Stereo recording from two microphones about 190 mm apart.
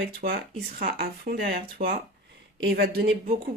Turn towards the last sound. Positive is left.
turn(degrees=-50)  # may be behind; listen again after turning